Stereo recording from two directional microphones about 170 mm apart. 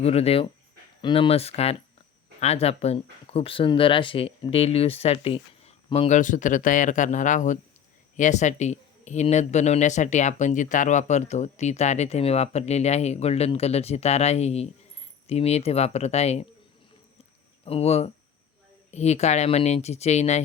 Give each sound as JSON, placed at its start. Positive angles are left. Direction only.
{"t": 0.0, "sound": "speech", "side_deg": 35}
{"t": 17.7, "sound": "speech", "side_deg": 35}